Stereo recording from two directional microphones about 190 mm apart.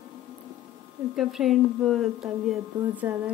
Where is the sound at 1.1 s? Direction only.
Centre (ahead or behind).